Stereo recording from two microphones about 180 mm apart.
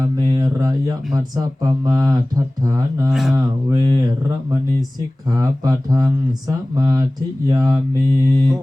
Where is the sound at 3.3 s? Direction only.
20° right (ahead or behind).